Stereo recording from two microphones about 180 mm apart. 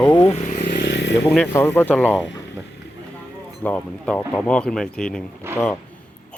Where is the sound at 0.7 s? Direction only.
70° left (ahead or behind).